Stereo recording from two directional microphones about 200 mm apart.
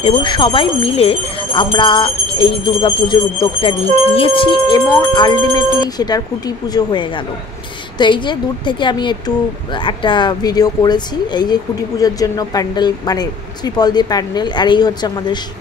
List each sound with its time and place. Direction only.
0.0 s a woman's voice: 25° left (ahead or behind)